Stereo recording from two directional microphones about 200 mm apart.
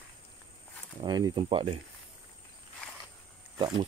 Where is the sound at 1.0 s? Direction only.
20° right (ahead or behind).